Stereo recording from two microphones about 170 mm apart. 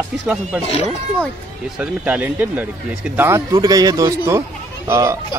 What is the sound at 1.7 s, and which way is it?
Speech, 10° right (ahead or behind).